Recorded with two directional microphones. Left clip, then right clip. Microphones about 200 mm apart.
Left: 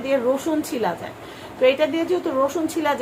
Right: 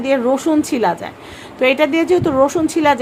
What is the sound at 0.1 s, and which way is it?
A woman's voice, 50° right (ahead or behind).